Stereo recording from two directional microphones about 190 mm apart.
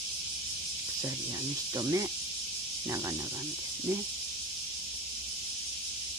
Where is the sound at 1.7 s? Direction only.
20° right (ahead or behind).